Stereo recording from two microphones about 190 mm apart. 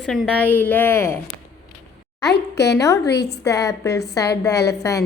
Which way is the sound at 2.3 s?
60° left (ahead or behind).